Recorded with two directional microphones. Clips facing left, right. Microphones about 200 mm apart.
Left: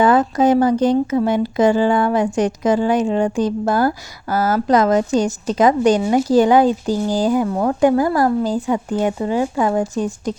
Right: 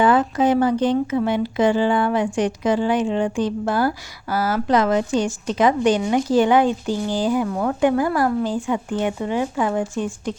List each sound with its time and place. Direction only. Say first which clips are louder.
0.0 s speech: left 3 dB; 40° left (ahead or behind)